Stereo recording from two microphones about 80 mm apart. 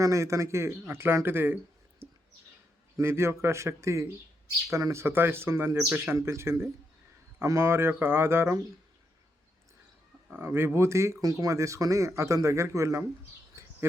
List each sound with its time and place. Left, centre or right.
0.0 s speech: right
2.0 s a sound: right
3.0 s speech: right
10.3 s speech: right
13.5 s bird: right